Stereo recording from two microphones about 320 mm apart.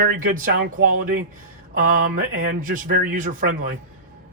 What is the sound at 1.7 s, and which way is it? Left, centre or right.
Speech, right.